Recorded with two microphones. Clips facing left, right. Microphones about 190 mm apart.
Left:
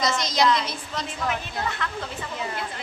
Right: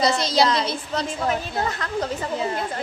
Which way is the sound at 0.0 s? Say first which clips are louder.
Right 3 dB; 30° right (ahead or behind).